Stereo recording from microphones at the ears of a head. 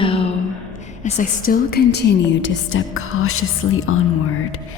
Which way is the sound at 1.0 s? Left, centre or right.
Left.